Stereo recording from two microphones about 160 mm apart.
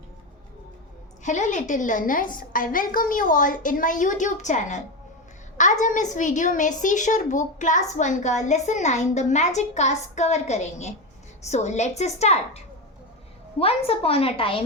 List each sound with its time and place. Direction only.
1.2 s a woman's voice: 50° left (ahead or behind)